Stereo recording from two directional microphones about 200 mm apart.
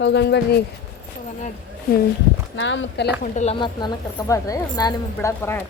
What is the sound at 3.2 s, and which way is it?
Speech, 35° left (ahead or behind).